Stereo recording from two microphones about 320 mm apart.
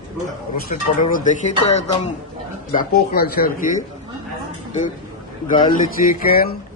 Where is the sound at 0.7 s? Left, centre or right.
Left.